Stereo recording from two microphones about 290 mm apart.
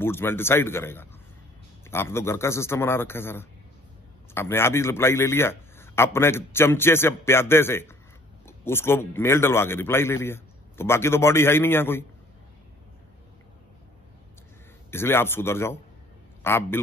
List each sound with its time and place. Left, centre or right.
0.0 s a man's voice: centre
14.9 s a man's voice: centre